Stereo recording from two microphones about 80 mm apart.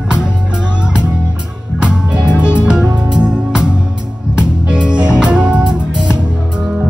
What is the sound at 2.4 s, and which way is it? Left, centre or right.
Music, centre.